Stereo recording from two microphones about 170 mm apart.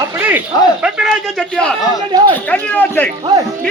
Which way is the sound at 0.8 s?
Centre (ahead or behind).